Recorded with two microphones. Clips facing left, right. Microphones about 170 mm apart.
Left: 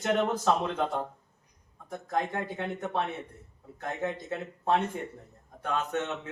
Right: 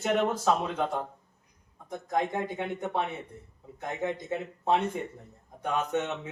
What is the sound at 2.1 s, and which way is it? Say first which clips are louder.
Speech: right 2 dB; 15° right (ahead or behind).